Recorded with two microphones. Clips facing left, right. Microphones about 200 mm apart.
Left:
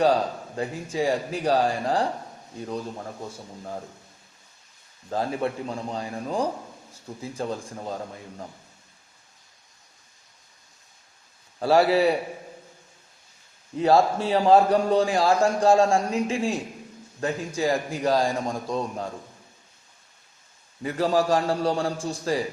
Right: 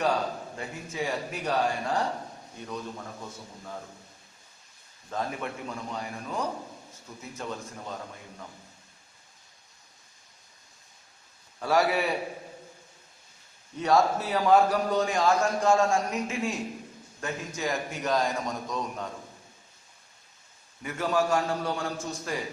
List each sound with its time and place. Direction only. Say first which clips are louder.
0.0 s a man's voice: left 6 dB; 35° left (ahead or behind)
5.1 s a man's voice: left 6 dB; 35° left (ahead or behind)
11.6 s a man's voice: left 6 dB; 30° left (ahead or behind)
13.7 s a man's voice: left 4 dB; 30° left (ahead or behind)
20.8 s a man's voice: left 5 dB; 35° left (ahead or behind)